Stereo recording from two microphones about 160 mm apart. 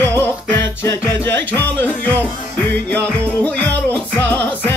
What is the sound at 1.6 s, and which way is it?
Speech, 10° left (ahead or behind).